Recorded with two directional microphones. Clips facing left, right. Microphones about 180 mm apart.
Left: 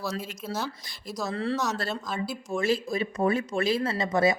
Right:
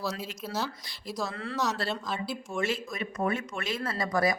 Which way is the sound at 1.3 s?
30° left (ahead or behind).